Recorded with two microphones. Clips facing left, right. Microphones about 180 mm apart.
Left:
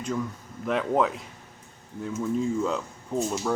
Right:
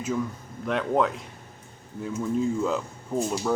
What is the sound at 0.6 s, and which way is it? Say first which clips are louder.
Speech: even; centre (ahead or behind).